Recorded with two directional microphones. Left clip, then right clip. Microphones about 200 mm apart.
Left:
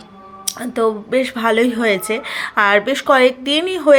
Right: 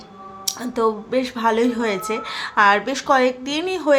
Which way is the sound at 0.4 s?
15° left (ahead or behind).